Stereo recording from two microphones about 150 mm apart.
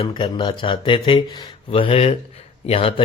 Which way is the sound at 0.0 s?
35° left (ahead or behind).